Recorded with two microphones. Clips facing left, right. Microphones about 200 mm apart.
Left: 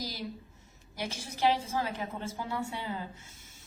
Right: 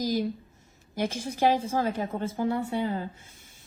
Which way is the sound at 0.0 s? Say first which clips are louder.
Right 11 dB; 50° right (ahead or behind).